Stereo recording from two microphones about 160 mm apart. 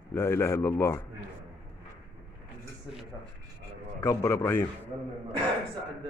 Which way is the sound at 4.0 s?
15° left (ahead or behind).